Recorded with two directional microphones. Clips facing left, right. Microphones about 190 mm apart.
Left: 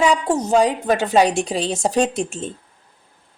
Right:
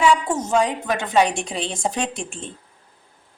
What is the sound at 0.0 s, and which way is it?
A woman's voice, 35° left (ahead or behind).